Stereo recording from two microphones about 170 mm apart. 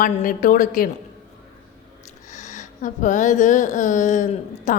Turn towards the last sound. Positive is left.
turn(degrees=50)  # may be behind; listen again after turning